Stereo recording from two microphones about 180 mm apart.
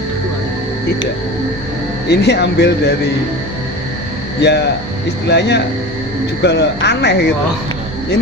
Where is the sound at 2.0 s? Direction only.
70° left (ahead or behind).